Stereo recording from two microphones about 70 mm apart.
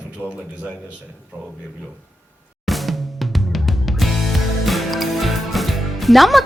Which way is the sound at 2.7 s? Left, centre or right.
Centre.